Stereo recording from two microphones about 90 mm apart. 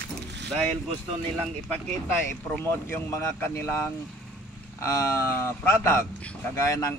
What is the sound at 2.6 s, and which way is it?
Speech, 25° left (ahead or behind).